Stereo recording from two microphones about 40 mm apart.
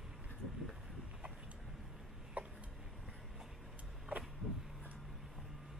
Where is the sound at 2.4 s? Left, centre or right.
Right.